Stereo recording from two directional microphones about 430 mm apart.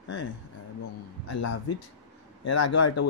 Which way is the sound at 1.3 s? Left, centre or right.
Left.